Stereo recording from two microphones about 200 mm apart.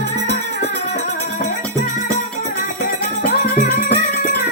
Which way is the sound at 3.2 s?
40° left (ahead or behind).